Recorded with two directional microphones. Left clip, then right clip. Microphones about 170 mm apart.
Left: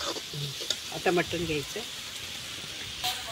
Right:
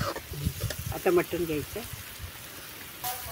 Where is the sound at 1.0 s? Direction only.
65° right (ahead or behind).